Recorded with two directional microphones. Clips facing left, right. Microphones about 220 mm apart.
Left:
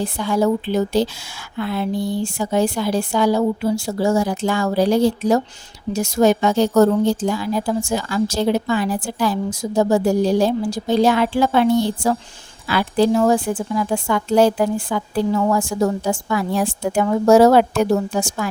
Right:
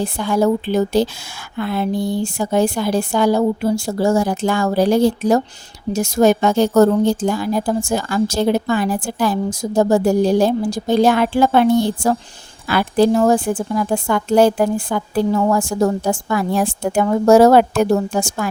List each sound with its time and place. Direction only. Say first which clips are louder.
0.2 s a woman's voice: right 2 dB; 50° right (ahead or behind)